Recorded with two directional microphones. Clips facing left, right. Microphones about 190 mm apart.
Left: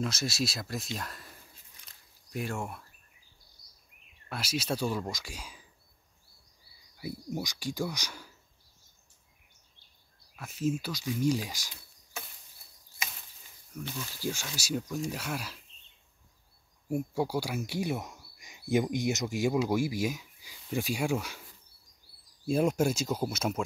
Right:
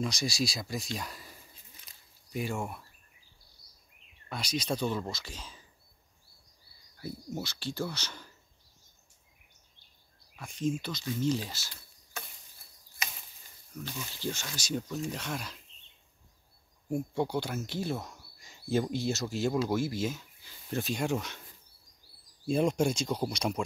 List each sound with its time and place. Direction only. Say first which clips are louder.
0.0 s speech: even; centre (ahead or behind)
3.6 s a sound: right 1 dB; 30° right (ahead or behind)
4.3 s speech: even; 5° left (ahead or behind)
7.0 s speech: left 2 dB; 15° left (ahead or behind)
10.3 s speech: left 1 dB; 5° left (ahead or behind)
13.7 s speech: left 1 dB; centre (ahead or behind)
16.9 s speech: even; 5° left (ahead or behind)
22.5 s speech: left 1 dB; 5° left (ahead or behind)